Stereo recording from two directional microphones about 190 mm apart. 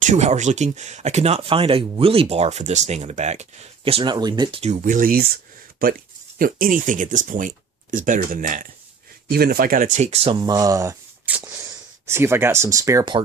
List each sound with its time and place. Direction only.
0.0 s speech: 40° right (ahead or behind); by 4.6 s 20° right (ahead or behind)
4.6 s speech: 40° right (ahead or behind)
10.4 s speech: 20° right (ahead or behind)